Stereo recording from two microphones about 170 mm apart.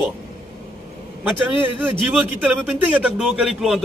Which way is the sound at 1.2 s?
10° right (ahead or behind).